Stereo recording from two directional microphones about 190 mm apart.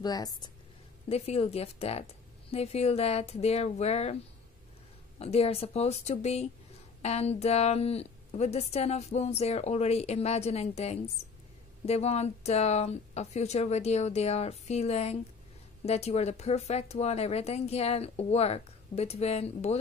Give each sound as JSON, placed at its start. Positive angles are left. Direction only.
{"t": 0.0, "sound": "speech", "side_deg": 20}
{"t": 1.0, "sound": "a woman's voice", "side_deg": 35}
{"t": 5.2, "sound": "a woman's voice", "side_deg": 30}